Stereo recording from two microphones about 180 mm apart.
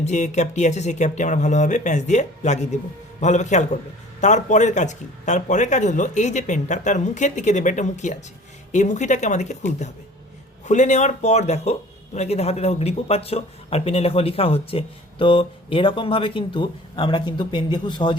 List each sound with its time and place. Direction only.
0.0 s speech: 40° left (ahead or behind)